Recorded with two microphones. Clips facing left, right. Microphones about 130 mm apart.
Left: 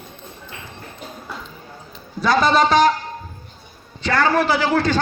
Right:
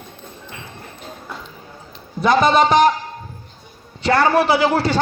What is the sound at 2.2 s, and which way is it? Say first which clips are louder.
Speech: right 2 dB; 20° right (ahead or behind).